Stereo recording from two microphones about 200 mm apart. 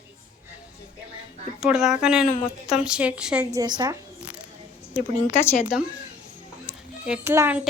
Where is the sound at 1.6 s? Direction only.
5° right (ahead or behind).